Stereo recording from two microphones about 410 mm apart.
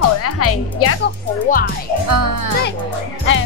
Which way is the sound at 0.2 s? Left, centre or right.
Left.